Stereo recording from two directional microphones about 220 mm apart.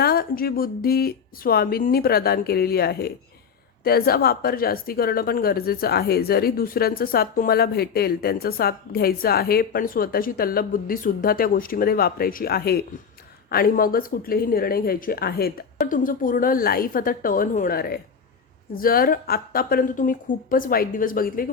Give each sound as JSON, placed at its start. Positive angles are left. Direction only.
{"t": 0.0, "sound": "a woman's voice", "side_deg": 45}